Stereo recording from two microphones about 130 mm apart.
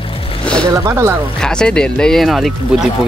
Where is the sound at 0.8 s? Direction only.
25° right (ahead or behind).